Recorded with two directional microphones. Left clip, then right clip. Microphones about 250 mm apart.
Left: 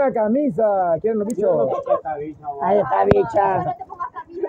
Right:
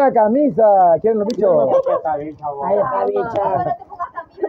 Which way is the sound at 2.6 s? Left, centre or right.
Left.